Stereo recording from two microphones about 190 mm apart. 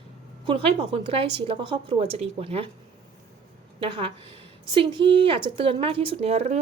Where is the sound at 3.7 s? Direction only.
25° right (ahead or behind).